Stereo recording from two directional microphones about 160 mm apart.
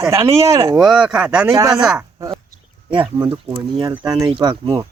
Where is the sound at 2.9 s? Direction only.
30° right (ahead or behind).